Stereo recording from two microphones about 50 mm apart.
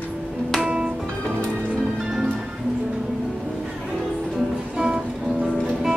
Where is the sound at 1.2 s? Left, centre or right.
Centre.